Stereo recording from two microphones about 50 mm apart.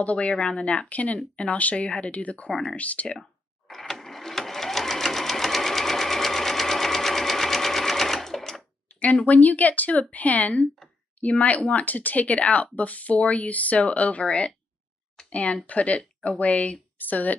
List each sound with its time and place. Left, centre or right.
0.0 s speech: left
3.2 s sewing machine: centre
9.0 s speech: left